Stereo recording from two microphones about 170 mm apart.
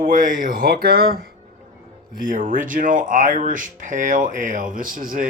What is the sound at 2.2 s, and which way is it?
Speech, 55° right (ahead or behind).